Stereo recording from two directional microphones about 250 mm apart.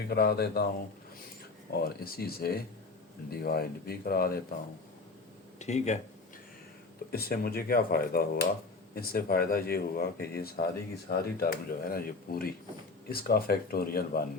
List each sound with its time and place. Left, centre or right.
0.1 s speech: left
1.7 s speech: left
5.5 s speech: left
7.1 s speech: left